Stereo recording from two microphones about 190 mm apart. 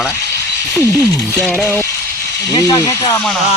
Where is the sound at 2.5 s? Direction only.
20° left (ahead or behind).